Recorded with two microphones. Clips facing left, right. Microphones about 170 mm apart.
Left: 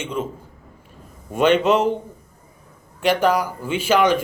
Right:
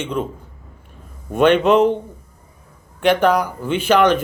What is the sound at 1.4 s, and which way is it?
Speech, 55° right (ahead or behind).